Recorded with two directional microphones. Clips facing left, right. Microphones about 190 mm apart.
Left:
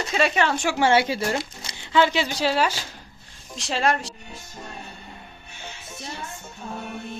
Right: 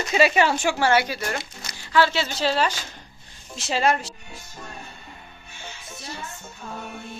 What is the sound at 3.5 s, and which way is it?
Speech, centre (ahead or behind).